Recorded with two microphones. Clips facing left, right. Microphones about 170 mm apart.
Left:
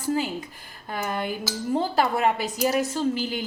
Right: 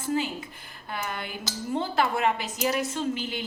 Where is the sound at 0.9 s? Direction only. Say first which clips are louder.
Left 6 dB; 40° left (ahead or behind).